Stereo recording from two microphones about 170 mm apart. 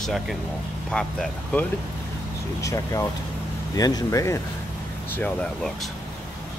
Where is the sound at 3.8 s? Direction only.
20° left (ahead or behind).